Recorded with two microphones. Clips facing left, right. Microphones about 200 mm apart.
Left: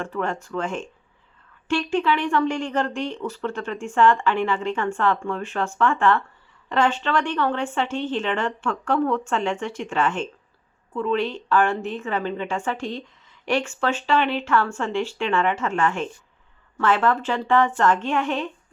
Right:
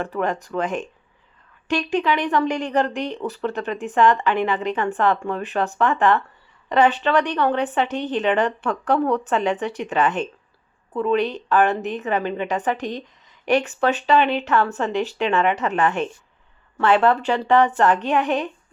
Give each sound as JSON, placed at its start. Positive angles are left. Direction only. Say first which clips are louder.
{"t": 0.4, "sound": "a woman's voice", "louder": "right 3 dB", "side_deg": -15}
{"t": 17.7, "sound": "speech", "louder": "right 2 dB", "side_deg": -15}